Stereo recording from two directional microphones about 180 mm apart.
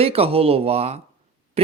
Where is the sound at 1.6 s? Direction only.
35° right (ahead or behind).